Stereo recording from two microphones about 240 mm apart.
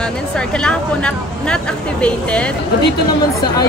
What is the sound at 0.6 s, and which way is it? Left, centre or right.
A woman's voice, centre.